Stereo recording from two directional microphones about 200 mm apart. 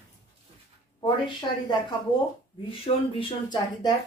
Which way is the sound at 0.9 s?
25° left (ahead or behind).